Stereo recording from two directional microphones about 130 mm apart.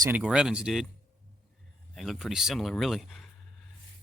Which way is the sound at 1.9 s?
Centre (ahead or behind).